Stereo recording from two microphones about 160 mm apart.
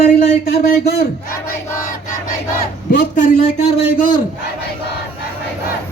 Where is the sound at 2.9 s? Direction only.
70° left (ahead or behind).